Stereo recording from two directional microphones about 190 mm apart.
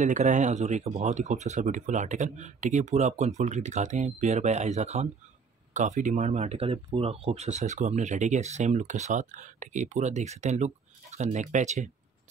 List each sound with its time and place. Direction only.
0.0 s speech: 40° right (ahead or behind)